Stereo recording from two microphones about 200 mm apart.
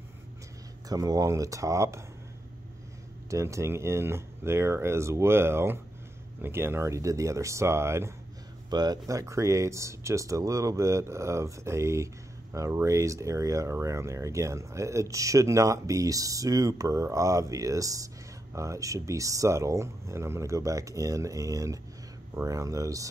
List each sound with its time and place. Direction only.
0.8 s speech: 15° right (ahead or behind)
3.3 s speech: 15° right (ahead or behind)